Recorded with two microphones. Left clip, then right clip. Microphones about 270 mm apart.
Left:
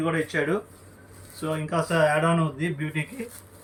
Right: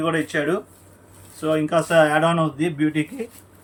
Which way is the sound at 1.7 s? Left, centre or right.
Right.